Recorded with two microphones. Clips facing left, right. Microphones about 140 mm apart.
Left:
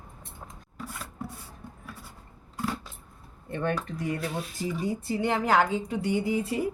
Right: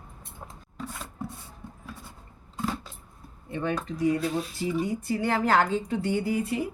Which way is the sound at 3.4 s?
55° left (ahead or behind).